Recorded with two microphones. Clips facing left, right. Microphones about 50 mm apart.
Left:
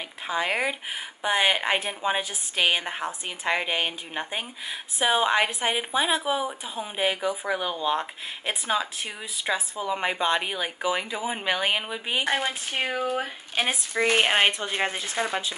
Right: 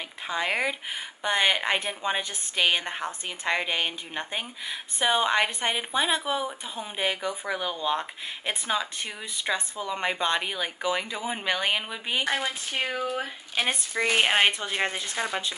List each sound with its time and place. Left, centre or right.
0.3 s a woman's voice: centre